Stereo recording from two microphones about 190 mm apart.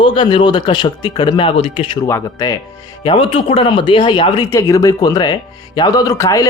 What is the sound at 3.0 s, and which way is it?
Speech, 30° left (ahead or behind).